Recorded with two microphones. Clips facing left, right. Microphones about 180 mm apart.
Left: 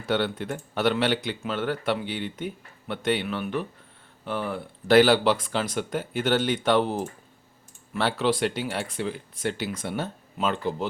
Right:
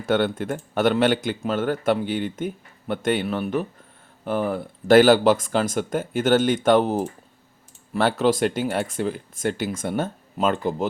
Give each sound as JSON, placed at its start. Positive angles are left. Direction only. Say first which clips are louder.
{"t": 0.0, "sound": "speech", "louder": "right 4 dB", "side_deg": -50}